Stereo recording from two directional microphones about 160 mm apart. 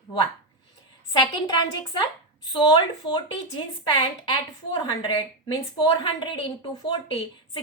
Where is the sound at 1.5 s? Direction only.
30° left (ahead or behind).